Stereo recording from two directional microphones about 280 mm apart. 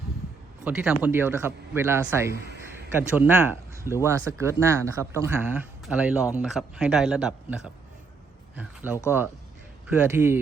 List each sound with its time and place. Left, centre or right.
0.6 s speech: centre